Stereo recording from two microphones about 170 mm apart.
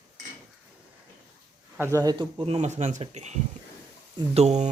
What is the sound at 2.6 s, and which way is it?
Speech, 45° right (ahead or behind).